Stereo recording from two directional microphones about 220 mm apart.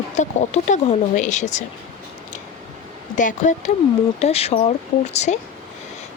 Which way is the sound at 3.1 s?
35° left (ahead or behind).